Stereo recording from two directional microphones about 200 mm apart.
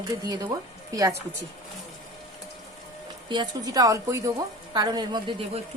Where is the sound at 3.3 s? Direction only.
20° right (ahead or behind).